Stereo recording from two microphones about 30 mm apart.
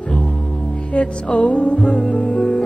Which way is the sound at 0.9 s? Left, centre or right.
Left.